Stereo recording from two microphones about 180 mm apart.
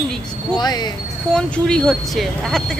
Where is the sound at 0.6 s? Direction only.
25° left (ahead or behind).